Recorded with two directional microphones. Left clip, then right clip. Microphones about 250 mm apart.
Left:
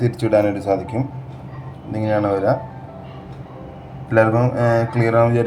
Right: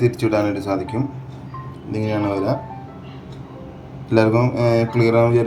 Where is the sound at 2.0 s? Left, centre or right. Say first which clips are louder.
Left 3 dB; centre.